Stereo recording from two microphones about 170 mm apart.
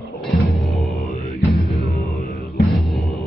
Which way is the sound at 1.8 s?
40° right (ahead or behind).